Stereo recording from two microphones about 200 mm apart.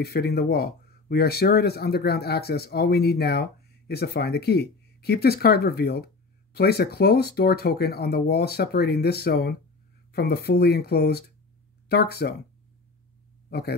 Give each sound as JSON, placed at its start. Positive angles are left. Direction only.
{"t": 0.0, "sound": "speech", "side_deg": 50}
{"t": 13.5, "sound": "speech", "side_deg": 50}